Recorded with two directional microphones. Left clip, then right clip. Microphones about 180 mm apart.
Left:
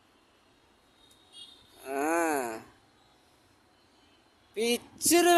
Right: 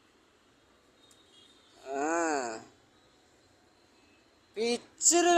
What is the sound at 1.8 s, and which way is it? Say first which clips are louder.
Groan: left 2 dB; 25° left (ahead or behind).